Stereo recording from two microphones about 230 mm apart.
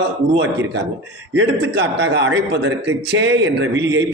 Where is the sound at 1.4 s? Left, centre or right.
Right.